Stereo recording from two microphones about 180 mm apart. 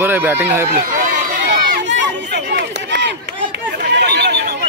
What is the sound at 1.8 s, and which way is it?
Run, 75° right (ahead or behind).